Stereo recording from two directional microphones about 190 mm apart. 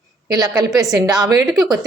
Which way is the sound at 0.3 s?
20° right (ahead or behind).